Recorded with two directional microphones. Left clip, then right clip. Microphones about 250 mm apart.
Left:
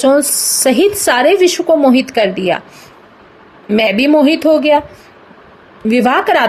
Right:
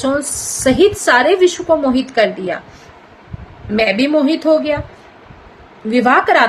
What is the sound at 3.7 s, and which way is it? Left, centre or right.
A woman's voice, left.